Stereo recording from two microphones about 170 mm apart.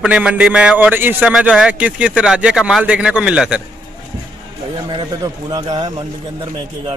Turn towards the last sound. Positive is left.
turn(degrees=-25)  # may be behind; listen again after turning